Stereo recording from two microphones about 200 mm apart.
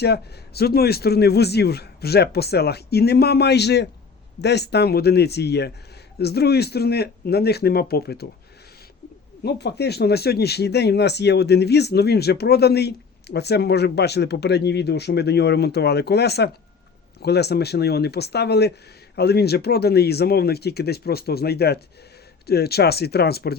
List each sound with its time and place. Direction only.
0.0 s a man's voice: 55° left (ahead or behind)
9.4 s a man's voice: 55° left (ahead or behind)